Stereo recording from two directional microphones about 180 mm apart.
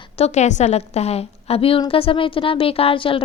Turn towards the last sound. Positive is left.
turn(degrees=30)  # may be behind; listen again after turning